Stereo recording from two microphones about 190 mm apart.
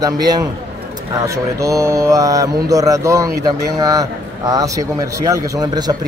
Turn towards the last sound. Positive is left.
turn(degrees=-20)  # may be behind; listen again after turning